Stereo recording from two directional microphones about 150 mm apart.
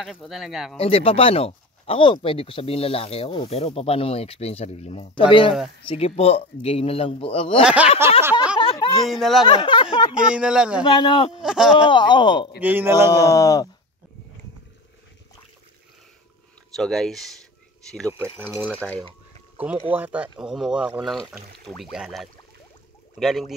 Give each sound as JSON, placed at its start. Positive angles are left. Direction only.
{"t": 0.0, "sound": "speech", "side_deg": 0}
{"t": 0.7, "sound": "speech", "side_deg": 40}
{"t": 7.6, "sound": "speech", "side_deg": -10}
{"t": 8.5, "sound": "a sound", "side_deg": 30}
{"t": 9.0, "sound": "speech", "side_deg": 0}
{"t": 9.5, "sound": "speech", "side_deg": 35}
{"t": 10.2, "sound": "speech", "side_deg": -5}
{"t": 10.9, "sound": "speech", "side_deg": 30}
{"t": 11.4, "sound": "speech", "side_deg": -5}
{"t": 11.9, "sound": "speech", "side_deg": 30}
{"t": 12.5, "sound": "speech", "side_deg": -10}
{"t": 13.2, "sound": "speech", "side_deg": 25}
{"t": 16.7, "sound": "speech", "side_deg": 5}
{"t": 18.5, "sound": "speech", "side_deg": -15}